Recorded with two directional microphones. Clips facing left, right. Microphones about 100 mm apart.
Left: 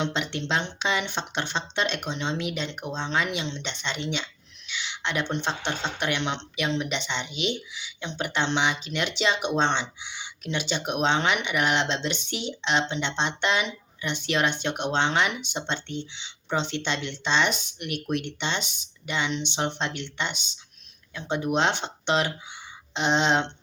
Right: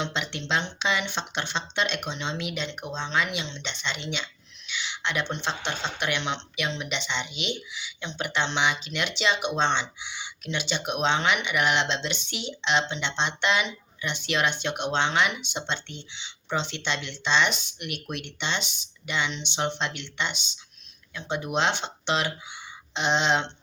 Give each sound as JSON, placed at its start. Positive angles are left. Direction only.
{"t": 0.0, "sound": "speech", "side_deg": 40}